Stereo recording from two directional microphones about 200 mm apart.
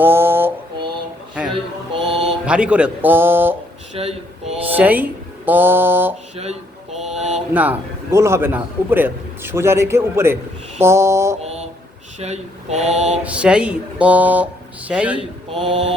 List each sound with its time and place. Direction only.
0.0 s mantra: 10° right (ahead or behind)
1.5 s mantra: 25° right (ahead or behind)
2.5 s a man's voice: 5° right (ahead or behind)
3.9 s a sound: 30° right (ahead or behind)
4.6 s a man's voice: 10° right (ahead or behind)
6.3 s mantra: 30° right (ahead or behind)
6.9 s mantra: centre (ahead or behind)
7.3 s a man's voice: 10° right (ahead or behind)
11.4 s mantra: 30° right (ahead or behind)
13.2 s a man's voice: 5° right (ahead or behind)
15.6 s mantra: 25° right (ahead or behind)